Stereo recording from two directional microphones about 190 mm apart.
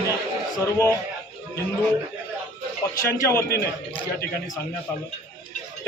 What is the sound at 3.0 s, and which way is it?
Speech, 15° left (ahead or behind).